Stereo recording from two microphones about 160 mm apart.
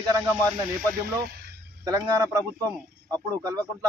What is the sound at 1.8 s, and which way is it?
Speech, 20° right (ahead or behind).